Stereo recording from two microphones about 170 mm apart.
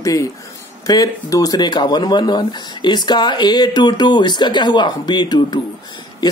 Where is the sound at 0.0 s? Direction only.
20° left (ahead or behind).